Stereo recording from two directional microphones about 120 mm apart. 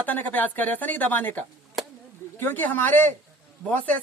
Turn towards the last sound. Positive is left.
turn(degrees=15)  # may be behind; listen again after turning